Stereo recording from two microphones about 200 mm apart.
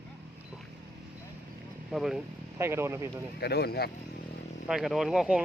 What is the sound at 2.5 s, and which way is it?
Speech, 15° right (ahead or behind).